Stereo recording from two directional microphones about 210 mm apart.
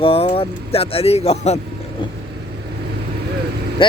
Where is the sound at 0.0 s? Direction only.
25° left (ahead or behind).